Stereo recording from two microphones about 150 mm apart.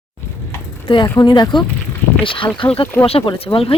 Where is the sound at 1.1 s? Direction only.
30° left (ahead or behind).